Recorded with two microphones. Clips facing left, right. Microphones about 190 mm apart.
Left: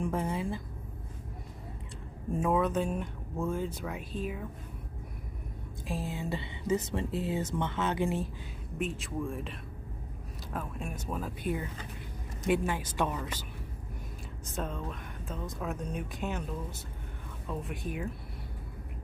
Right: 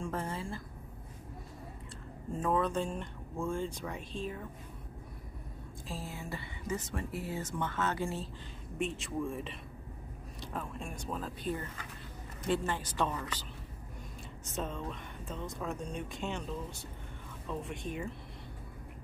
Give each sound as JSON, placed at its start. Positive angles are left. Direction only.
{"t": 0.0, "sound": "speech", "side_deg": 15}
{"t": 2.3, "sound": "speech", "side_deg": 10}
{"t": 5.9, "sound": "speech", "side_deg": 20}
{"t": 8.7, "sound": "speech", "side_deg": 0}
{"t": 14.4, "sound": "speech", "side_deg": 0}
{"t": 17.5, "sound": "speech", "side_deg": 0}